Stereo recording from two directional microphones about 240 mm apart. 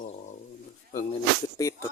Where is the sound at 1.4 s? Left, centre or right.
Centre.